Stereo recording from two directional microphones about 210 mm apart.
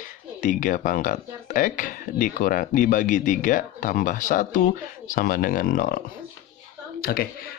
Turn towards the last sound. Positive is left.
turn(degrees=45)  # may be behind; listen again after turning